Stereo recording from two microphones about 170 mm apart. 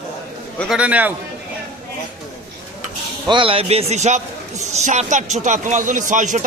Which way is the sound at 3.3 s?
30° right (ahead or behind).